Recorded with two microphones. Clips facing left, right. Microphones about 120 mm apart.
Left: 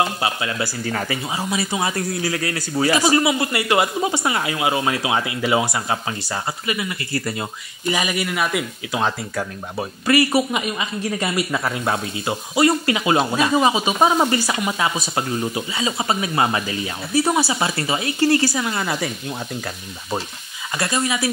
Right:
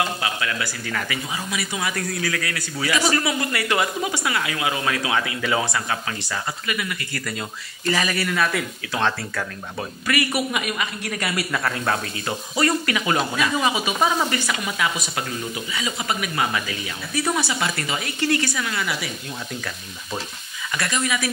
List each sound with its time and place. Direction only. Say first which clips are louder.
0.0 s speech: left 3 dB; 25° left (ahead or behind)
3.0 s speech: left 4 dB; 20° left (ahead or behind)
7.8 s speech: left 1 dB; 15° left (ahead or behind)
9.3 s speech: left 3 dB; 25° left (ahead or behind)
20.7 s speech: left 3 dB; 30° left (ahead or behind)